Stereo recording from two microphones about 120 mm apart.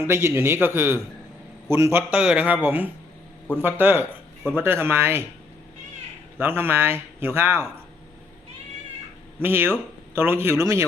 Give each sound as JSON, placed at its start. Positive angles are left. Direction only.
{"t": 0.1, "sound": "speech", "side_deg": -20}
{"t": 2.1, "sound": "speech", "side_deg": -10}
{"t": 6.4, "sound": "speech", "side_deg": -20}
{"t": 9.4, "sound": "speech", "side_deg": -20}